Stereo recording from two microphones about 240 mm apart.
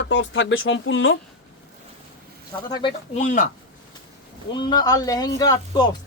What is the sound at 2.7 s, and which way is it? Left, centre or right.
Speech, centre.